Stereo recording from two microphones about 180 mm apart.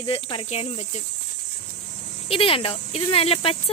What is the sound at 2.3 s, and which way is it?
Speech, 30° left (ahead or behind).